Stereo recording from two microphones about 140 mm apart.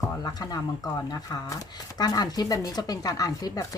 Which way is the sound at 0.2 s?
25° left (ahead or behind).